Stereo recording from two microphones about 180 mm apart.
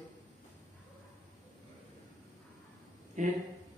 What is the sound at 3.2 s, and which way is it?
Speech, 45° right (ahead or behind).